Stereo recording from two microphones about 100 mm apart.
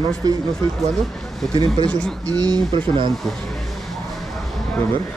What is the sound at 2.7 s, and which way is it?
Speech, 60° right (ahead or behind).